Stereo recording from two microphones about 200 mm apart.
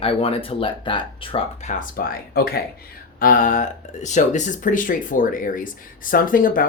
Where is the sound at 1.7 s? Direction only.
50° left (ahead or behind).